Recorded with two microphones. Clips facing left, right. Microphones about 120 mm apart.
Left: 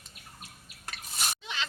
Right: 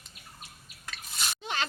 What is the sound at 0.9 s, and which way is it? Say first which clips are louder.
Drip: left 1 dB; 45° left (ahead or behind).